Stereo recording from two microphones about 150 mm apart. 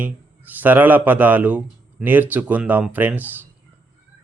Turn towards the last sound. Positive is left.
turn(degrees=-10)  # may be behind; listen again after turning